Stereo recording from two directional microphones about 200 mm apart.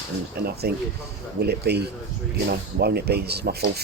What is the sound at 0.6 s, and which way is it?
Speech, 50° right (ahead or behind).